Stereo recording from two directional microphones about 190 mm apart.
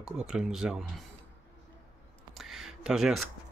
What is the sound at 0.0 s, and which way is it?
Speech, 5° right (ahead or behind).